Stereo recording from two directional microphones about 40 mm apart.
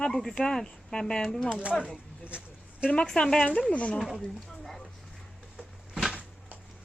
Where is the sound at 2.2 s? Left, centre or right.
Right.